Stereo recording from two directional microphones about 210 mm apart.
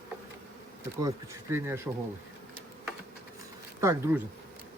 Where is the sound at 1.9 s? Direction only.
10° right (ahead or behind).